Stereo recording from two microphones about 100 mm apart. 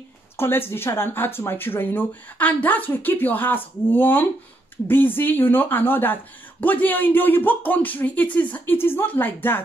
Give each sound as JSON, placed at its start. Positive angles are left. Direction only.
{"t": 0.4, "sound": "speech", "side_deg": 25}